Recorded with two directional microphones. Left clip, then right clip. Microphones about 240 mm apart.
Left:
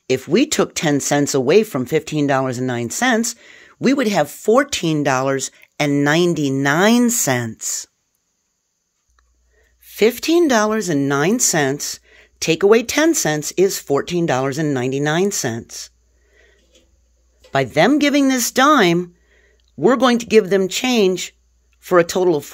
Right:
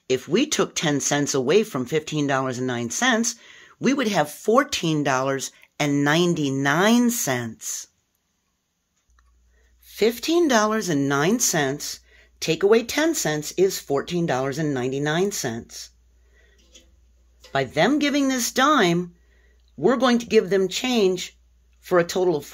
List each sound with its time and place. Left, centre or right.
0.0 s speech: left
9.8 s speech: left
17.5 s speech: left